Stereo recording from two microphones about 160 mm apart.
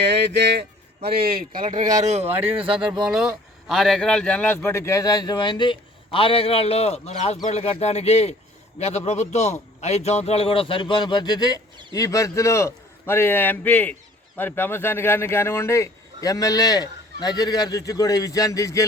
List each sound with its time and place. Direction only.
0.0 s speech: 90° right
1.0 s speech: 70° right (ahead or behind); by 2.3 s 45° right (ahead or behind)
3.0 s a man's voice: 5° right (ahead or behind); by 18.9 s 20° left (ahead or behind)